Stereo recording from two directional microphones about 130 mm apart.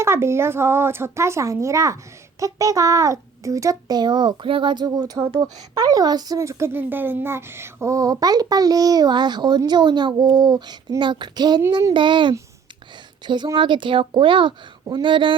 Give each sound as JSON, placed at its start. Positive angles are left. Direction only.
{"t": 0.0, "sound": "a child's voice", "side_deg": -20}